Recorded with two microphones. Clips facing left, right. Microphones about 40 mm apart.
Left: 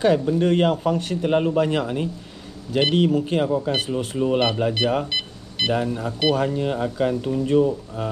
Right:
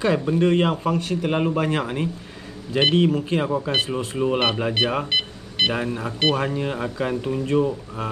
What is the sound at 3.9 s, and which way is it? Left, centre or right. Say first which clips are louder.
Speech: left 1 dB; right.